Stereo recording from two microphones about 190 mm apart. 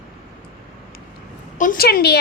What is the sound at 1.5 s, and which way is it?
Speech, 45° left (ahead or behind).